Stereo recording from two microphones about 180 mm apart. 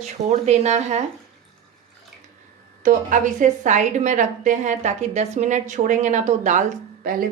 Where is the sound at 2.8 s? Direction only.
45° right (ahead or behind).